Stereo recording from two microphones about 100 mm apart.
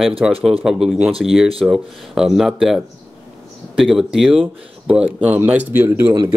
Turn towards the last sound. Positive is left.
turn(degrees=-20)  # may be behind; listen again after turning